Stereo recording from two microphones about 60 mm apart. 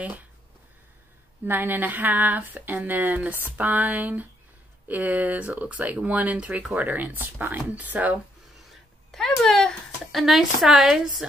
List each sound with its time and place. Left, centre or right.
1.4 s speech: right
9.1 s a sound: centre
10.2 s speech: centre